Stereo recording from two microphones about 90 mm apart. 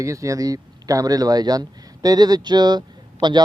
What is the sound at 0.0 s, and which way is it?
Speech, 35° right (ahead or behind).